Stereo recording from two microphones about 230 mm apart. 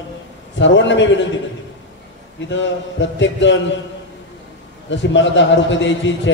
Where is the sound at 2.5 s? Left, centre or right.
Left.